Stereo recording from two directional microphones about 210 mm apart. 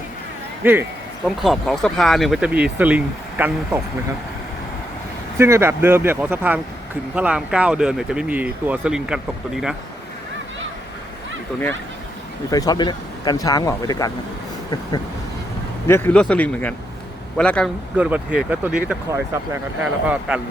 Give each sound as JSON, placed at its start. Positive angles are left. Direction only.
{"t": 0.6, "sound": "speech", "side_deg": -10}
{"t": 5.4, "sound": "speech", "side_deg": -15}
{"t": 12.5, "sound": "speech", "side_deg": 15}
{"t": 15.9, "sound": "speech", "side_deg": 10}
{"t": 17.9, "sound": "speech", "side_deg": -5}